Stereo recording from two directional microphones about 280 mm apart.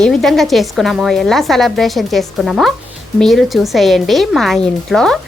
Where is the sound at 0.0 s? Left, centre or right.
Centre.